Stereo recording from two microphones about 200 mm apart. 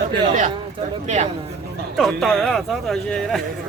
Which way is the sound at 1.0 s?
35° right (ahead or behind).